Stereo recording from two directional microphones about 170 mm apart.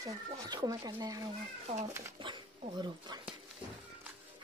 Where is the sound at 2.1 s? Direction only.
30° right (ahead or behind).